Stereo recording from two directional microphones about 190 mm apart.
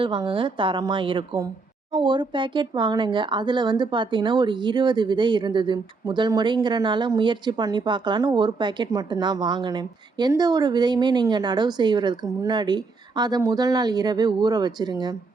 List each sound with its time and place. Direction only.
0.0 s speech: 25° right (ahead or behind)